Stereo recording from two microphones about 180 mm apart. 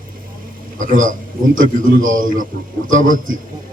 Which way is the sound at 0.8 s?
45° right (ahead or behind).